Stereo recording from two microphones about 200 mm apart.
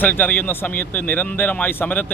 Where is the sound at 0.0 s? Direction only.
10° left (ahead or behind).